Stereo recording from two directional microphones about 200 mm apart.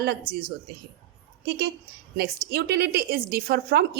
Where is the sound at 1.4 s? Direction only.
55° right (ahead or behind).